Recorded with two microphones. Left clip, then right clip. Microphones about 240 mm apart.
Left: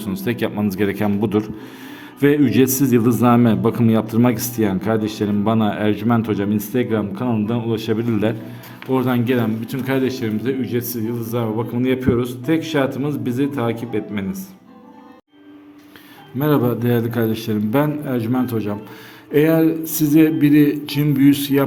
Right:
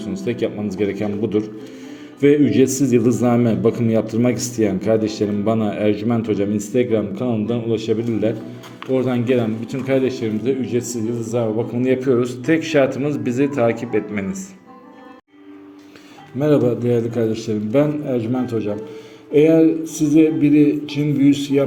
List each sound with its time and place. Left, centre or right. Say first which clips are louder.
0.0 s a man's voice: even; left
16.4 s a man's voice: right 2 dB; left